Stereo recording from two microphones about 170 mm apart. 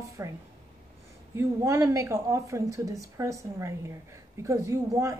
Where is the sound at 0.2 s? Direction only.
20° right (ahead or behind).